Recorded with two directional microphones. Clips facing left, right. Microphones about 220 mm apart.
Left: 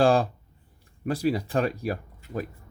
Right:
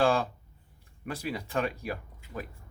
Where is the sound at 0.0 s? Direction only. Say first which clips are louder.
Left 5 dB; 35° left (ahead or behind).